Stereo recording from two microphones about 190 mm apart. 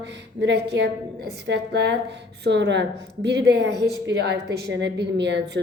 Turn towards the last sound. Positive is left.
turn(degrees=-65)  # may be behind; listen again after turning